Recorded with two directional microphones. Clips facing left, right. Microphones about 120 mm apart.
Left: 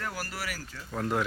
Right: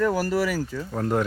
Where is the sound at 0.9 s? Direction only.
35° right (ahead or behind).